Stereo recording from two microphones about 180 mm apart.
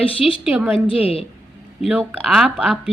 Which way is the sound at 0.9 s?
30° left (ahead or behind).